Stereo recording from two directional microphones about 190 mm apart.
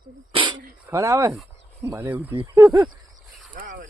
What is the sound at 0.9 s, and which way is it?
Speech, 15° right (ahead or behind).